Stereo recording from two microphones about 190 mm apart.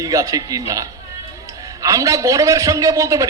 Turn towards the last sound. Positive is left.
turn(degrees=-15)  # may be behind; listen again after turning